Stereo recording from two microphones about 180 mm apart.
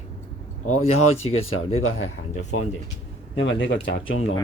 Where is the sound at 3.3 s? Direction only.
90° left.